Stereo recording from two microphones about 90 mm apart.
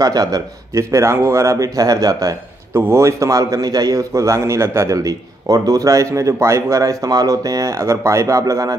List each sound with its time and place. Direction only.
0.0 s a man's voice: 45° right (ahead or behind)
2.7 s a man's voice: 30° right (ahead or behind)